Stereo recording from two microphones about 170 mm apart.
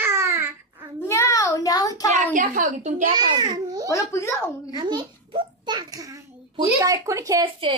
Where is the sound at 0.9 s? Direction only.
15° left (ahead or behind).